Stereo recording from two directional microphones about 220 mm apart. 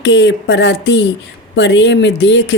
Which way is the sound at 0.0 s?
55° left (ahead or behind).